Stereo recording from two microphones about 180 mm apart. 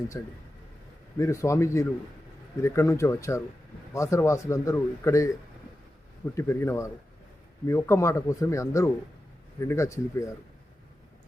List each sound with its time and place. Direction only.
0.1 s a man's voice: 15° left (ahead or behind)
6.3 s a man's voice: 15° left (ahead or behind)